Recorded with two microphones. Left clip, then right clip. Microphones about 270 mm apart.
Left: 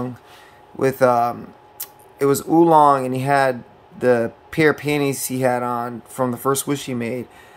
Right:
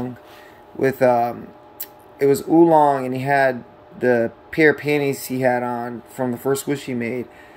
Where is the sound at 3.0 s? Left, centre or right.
Left.